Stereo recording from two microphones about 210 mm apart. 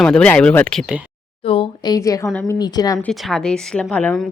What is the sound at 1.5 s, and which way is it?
Speech, 20° left (ahead or behind).